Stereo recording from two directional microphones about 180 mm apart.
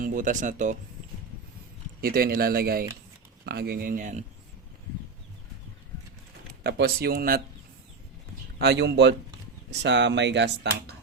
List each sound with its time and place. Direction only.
0.0 s speech: 50° right (ahead or behind)
2.0 s speech: 55° right (ahead or behind)
6.6 s speech: 65° right (ahead or behind)
8.5 s speech: 65° right (ahead or behind)